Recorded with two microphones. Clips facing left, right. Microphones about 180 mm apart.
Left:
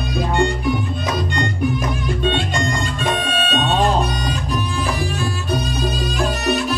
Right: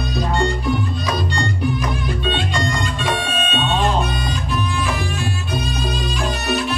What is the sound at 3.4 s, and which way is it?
Music, 40° left (ahead or behind).